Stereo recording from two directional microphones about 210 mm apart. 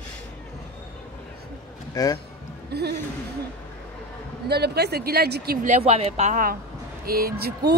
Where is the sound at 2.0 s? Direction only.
15° left (ahead or behind).